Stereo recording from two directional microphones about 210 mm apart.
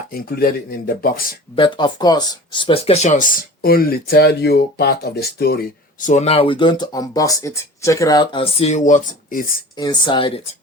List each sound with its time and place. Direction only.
0.1 s speech: 45° left (ahead or behind)
1.5 s speech: 20° left (ahead or behind); by 9.5 s 40° left (ahead or behind)
9.7 s speech: 20° left (ahead or behind)